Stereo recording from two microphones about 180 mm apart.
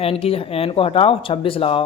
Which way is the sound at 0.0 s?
35° left (ahead or behind).